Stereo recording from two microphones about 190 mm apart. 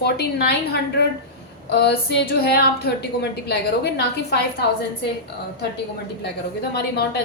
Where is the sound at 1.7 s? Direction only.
60° left (ahead or behind).